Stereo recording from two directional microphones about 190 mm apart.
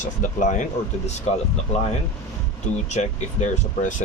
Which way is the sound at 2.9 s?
40° left (ahead or behind).